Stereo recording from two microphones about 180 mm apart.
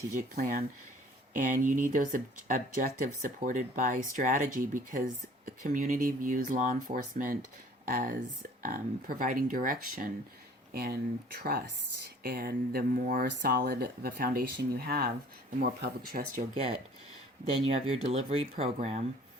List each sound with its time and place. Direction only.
0.1 s speech: 45° right (ahead or behind)
12.2 s speech: 55° right (ahead or behind)
17.9 s speech: 35° right (ahead or behind)